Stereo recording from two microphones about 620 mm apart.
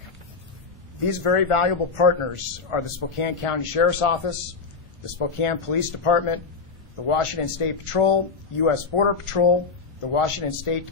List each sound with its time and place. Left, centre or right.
1.2 s a man's voice: left